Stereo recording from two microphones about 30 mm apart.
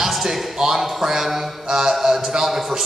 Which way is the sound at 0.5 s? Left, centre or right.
Right.